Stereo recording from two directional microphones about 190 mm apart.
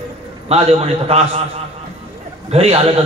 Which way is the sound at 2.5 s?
35° right (ahead or behind).